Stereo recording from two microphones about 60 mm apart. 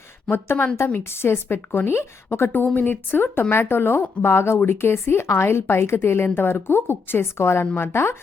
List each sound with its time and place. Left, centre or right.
0.3 s speech: left
2.7 s speech: left